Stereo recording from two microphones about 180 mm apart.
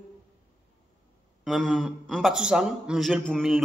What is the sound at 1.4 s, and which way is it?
A man's voice, centre (ahead or behind).